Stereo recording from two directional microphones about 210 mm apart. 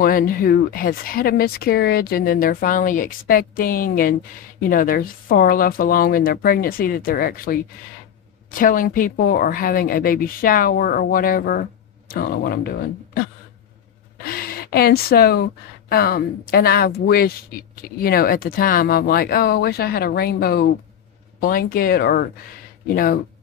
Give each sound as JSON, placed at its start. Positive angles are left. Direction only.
{"t": 0.0, "sound": "speech", "side_deg": 45}
{"t": 14.2, "sound": "speech", "side_deg": 45}